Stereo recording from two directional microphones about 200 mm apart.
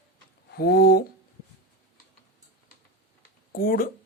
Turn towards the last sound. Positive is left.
turn(degrees=45)  # may be behind; listen again after turning